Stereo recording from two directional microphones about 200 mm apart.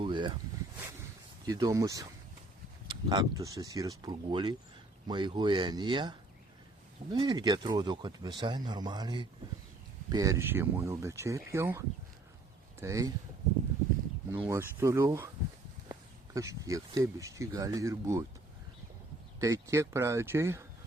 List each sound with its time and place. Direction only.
0.0 s a sound: 25° right (ahead or behind)
1.5 s speech: 15° right (ahead or behind)
14.4 s speech: 10° right (ahead or behind)
19.4 s speech: 15° right (ahead or behind)